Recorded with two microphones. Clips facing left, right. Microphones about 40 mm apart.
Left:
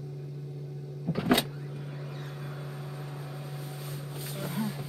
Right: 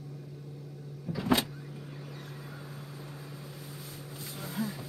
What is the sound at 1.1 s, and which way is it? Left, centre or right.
Power windows, left.